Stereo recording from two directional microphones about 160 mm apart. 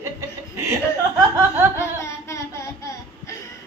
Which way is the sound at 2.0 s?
20° left (ahead or behind).